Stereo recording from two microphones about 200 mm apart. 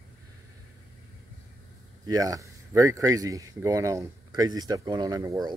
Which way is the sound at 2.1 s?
15° right (ahead or behind).